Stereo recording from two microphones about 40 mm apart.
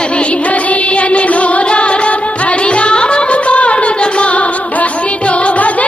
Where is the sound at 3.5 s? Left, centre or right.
Left.